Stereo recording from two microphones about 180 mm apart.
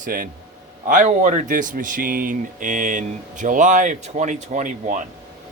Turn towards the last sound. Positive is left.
turn(degrees=-45)  # may be behind; listen again after turning